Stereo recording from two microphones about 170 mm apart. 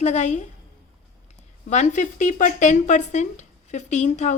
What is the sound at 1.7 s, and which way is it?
Speech, 45° left (ahead or behind).